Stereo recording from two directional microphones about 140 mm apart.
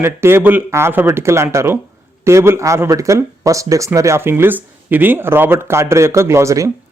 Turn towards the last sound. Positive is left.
turn(degrees=-20)  # may be behind; listen again after turning